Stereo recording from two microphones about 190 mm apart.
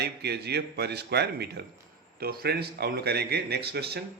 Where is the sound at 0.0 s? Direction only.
60° right (ahead or behind).